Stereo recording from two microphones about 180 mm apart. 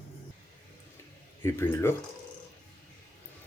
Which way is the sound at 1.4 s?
15° left (ahead or behind).